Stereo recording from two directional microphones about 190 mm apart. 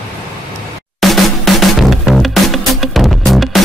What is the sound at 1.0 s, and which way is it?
Music, centre (ahead or behind).